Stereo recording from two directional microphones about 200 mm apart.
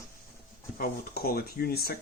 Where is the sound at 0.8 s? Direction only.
50° left (ahead or behind).